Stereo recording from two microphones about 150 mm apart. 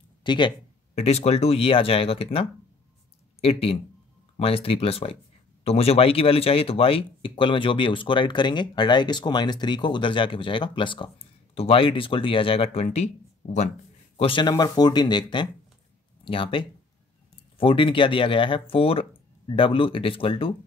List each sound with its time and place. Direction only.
0.2 s speech: 30° left (ahead or behind)
0.9 s speech: 45° left (ahead or behind)
14.1 s speech: 35° left (ahead or behind)